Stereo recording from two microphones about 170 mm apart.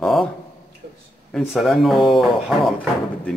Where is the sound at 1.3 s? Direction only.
Centre (ahead or behind).